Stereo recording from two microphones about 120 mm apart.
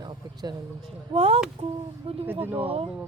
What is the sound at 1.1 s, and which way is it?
Speech, 55° right (ahead or behind).